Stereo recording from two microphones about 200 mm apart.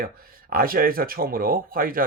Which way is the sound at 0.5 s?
45° right (ahead or behind).